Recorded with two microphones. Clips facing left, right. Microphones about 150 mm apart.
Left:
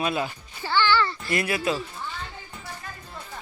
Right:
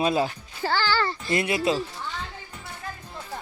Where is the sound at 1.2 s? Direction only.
25° right (ahead or behind).